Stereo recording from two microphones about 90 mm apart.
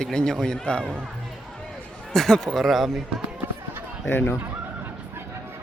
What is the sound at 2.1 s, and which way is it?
Speech, 5° left (ahead or behind).